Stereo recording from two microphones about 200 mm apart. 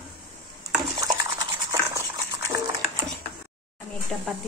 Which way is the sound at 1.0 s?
15° right (ahead or behind).